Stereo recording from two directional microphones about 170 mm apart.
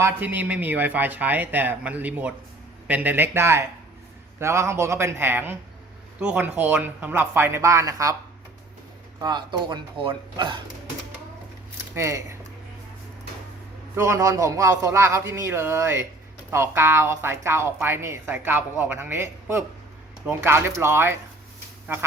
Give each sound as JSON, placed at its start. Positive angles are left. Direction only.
{"t": 0.0, "sound": "speech", "side_deg": -10}
{"t": 9.2, "sound": "speech", "side_deg": -25}
{"t": 11.9, "sound": "speech", "side_deg": -15}
{"t": 13.9, "sound": "speech", "side_deg": -15}